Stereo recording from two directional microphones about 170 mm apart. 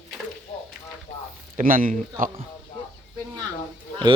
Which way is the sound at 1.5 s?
55° right (ahead or behind).